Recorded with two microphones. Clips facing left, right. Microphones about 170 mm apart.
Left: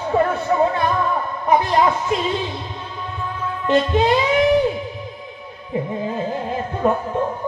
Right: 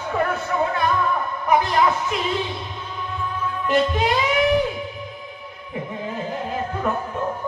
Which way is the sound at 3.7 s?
25° left (ahead or behind).